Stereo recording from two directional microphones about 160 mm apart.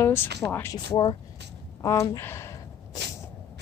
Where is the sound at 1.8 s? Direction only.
20° left (ahead or behind).